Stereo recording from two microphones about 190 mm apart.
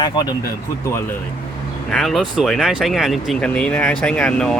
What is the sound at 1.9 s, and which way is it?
Speech, centre (ahead or behind).